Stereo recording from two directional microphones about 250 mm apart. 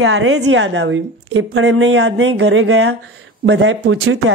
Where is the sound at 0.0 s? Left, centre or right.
Right.